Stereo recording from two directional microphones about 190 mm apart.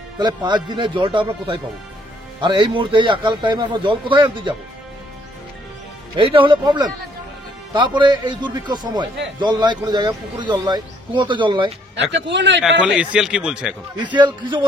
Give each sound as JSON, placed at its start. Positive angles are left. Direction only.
{"t": 0.2, "sound": "a man's voice", "side_deg": -25}
{"t": 6.1, "sound": "a man's voice", "side_deg": -25}
{"t": 12.0, "sound": "a man's voice", "side_deg": -70}
{"t": 12.6, "sound": "a man's voice", "side_deg": -5}
{"t": 13.9, "sound": "a man's voice", "side_deg": -25}